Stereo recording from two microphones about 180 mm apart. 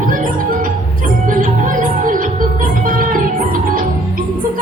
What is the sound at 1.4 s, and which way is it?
Music, 50° right (ahead or behind).